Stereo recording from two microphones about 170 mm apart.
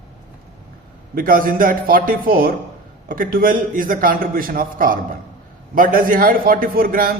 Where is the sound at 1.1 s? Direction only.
55° right (ahead or behind).